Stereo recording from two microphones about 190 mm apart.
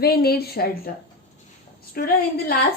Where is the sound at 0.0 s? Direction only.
55° left (ahead or behind).